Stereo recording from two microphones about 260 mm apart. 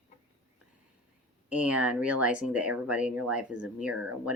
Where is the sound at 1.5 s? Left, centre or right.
Centre.